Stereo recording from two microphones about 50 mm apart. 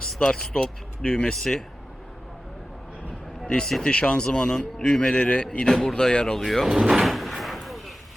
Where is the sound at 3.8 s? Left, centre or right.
Left.